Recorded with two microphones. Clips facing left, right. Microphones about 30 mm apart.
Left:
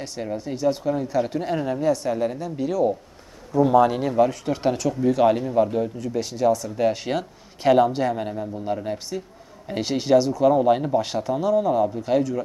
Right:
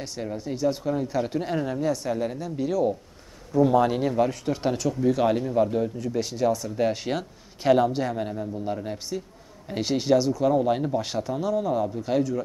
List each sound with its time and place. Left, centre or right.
0.0 s speech: centre